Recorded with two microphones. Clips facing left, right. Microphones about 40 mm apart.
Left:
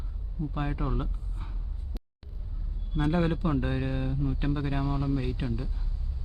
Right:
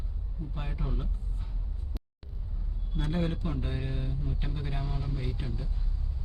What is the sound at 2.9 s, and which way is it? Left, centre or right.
A man's voice, left.